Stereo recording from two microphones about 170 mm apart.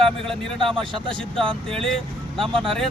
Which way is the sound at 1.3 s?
30° right (ahead or behind).